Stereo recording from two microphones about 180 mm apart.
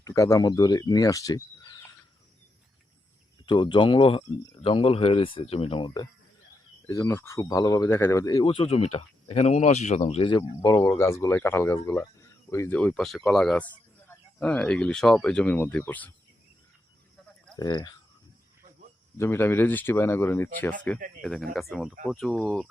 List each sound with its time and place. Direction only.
0.0 s speech: 15° left (ahead or behind)
3.4 s speech: 25° left (ahead or behind)
6.8 s speech: 15° left (ahead or behind)
17.6 s speech: 20° left (ahead or behind)
19.2 s speech: 15° left (ahead or behind)
21.2 s speech: centre (ahead or behind)